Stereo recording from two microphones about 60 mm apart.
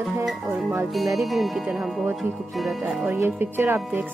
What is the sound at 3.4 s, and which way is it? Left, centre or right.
Speech, right.